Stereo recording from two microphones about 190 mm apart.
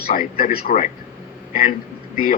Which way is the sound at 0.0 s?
50° left (ahead or behind).